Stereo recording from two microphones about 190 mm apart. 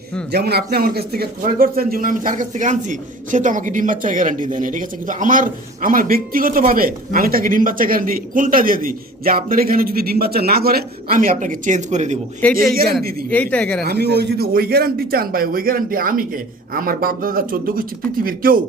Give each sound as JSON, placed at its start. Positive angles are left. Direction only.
{"t": 0.3, "sound": "a man's voice", "side_deg": -60}
{"t": 12.4, "sound": "speech", "side_deg": 5}
{"t": 13.0, "sound": "a man's voice", "side_deg": -50}
{"t": 13.3, "sound": "speech", "side_deg": 5}
{"t": 13.8, "sound": "a man's voice", "side_deg": -60}